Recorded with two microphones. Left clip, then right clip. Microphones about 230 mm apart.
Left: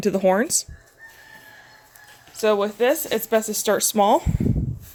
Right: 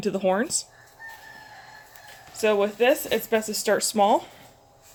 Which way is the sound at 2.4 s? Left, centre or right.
Left.